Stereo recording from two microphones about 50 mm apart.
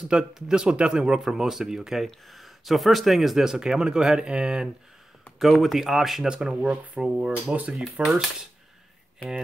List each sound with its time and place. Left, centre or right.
0.1 s speech: centre
1.2 s speech: centre
5.4 s speech: centre
6.2 s speech: centre
7.7 s speech: centre